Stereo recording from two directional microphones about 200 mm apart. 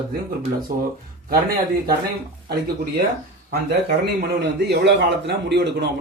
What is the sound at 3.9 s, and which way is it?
Speech, 55° right (ahead or behind).